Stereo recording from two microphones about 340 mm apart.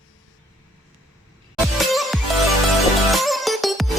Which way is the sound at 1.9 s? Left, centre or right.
Centre.